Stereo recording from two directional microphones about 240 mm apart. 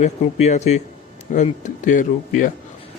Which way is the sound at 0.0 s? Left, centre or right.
Left.